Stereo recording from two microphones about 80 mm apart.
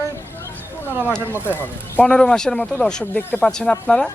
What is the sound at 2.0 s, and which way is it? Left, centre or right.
Speech, centre.